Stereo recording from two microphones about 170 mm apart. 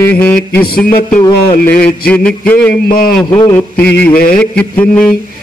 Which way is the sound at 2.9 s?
60° left (ahead or behind).